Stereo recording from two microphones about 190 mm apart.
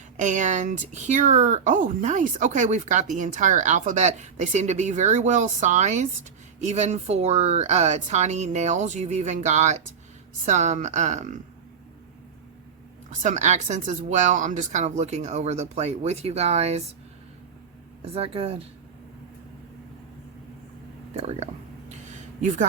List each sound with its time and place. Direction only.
0.2 s speech: 40° right (ahead or behind)
13.1 s speech: 40° right (ahead or behind)
18.0 s speech: 30° right (ahead or behind)
21.1 s a sound: 35° right (ahead or behind)